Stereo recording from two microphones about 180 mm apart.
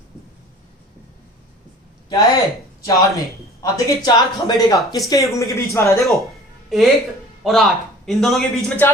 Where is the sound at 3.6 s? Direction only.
20° left (ahead or behind).